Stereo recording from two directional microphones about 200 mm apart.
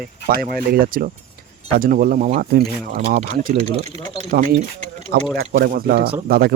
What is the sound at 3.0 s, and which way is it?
Speech, 40° right (ahead or behind).